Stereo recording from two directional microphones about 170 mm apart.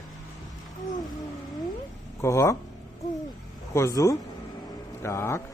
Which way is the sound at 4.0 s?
20° left (ahead or behind).